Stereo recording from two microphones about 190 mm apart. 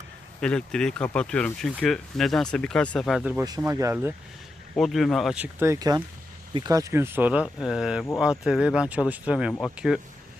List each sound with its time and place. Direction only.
0.4 s speech: 5° left (ahead or behind)
3.7 s speech: 15° right (ahead or behind)
4.8 s speech: centre (ahead or behind)